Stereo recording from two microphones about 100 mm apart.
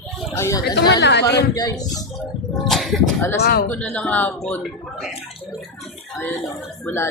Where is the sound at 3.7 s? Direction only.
15° left (ahead or behind).